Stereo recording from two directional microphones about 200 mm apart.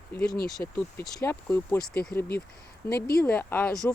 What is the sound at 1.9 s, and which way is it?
Speech, 50° left (ahead or behind).